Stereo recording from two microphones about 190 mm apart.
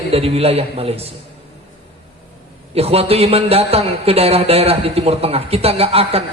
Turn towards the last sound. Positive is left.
turn(degrees=-30)  # may be behind; listen again after turning